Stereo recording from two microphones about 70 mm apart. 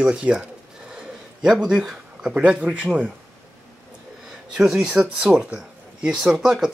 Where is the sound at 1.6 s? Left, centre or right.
Centre.